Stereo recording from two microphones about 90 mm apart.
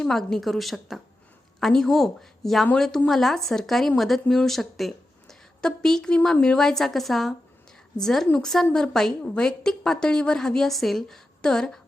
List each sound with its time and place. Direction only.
0.0 s a woman's voice: 5° left (ahead or behind)